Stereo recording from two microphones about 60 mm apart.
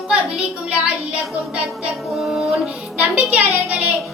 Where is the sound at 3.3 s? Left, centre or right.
Right.